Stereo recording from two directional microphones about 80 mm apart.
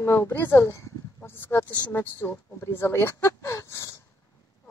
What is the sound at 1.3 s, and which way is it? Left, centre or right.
Speech, left.